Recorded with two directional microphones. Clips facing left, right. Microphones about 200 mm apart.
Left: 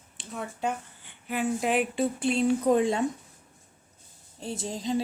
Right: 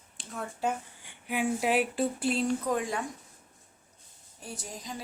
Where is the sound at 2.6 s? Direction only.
25° left (ahead or behind).